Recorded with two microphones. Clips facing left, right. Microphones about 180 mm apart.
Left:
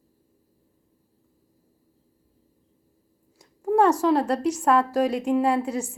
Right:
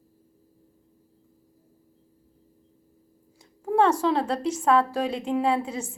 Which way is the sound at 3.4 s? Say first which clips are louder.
Left 2 dB; 10° left (ahead or behind).